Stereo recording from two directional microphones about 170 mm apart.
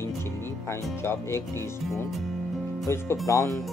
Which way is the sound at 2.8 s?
15° left (ahead or behind).